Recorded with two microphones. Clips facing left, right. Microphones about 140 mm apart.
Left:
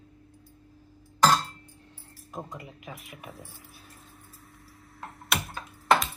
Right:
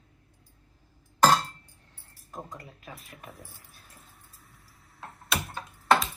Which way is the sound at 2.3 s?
15° left (ahead or behind).